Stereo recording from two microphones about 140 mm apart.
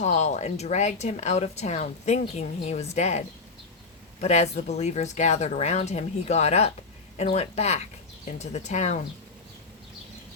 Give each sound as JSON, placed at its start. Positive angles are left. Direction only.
{"t": 0.0, "sound": "speech", "side_deg": 55}